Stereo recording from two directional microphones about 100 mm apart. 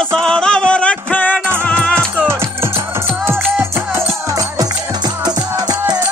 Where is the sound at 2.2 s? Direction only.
25° right (ahead or behind).